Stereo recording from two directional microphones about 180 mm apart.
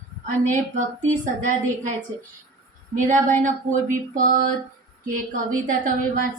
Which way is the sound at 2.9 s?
45° right (ahead or behind).